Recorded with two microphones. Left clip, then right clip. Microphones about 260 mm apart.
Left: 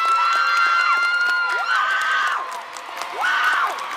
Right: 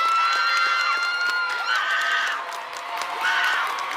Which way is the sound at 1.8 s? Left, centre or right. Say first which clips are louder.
Left 3 dB; centre.